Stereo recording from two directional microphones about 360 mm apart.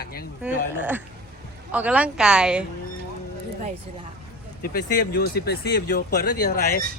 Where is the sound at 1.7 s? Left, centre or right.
Centre.